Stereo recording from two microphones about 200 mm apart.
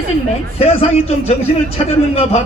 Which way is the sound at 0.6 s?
30° left (ahead or behind).